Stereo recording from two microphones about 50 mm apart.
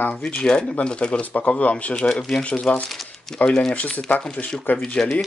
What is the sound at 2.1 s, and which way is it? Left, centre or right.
Speech, centre.